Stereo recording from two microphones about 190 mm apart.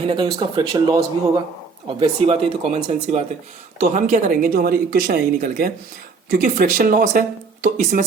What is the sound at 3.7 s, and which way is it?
Speech, 40° right (ahead or behind).